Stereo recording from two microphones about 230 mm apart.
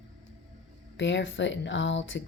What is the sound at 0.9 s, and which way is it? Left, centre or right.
Speech, left.